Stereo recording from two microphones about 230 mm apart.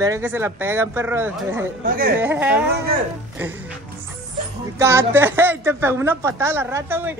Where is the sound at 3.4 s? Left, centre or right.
Centre.